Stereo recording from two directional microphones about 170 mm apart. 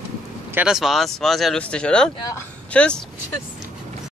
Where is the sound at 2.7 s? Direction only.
5° left (ahead or behind).